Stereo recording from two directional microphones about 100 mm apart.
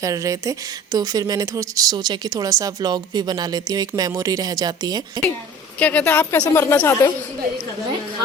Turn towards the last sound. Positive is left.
turn(degrees=25)  # may be behind; listen again after turning